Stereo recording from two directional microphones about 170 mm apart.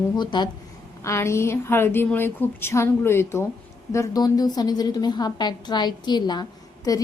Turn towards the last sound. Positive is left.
turn(degrees=25)  # may be behind; listen again after turning